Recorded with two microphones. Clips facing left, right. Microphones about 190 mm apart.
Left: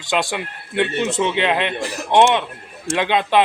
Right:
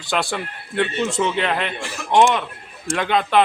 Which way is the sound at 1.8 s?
40° left (ahead or behind).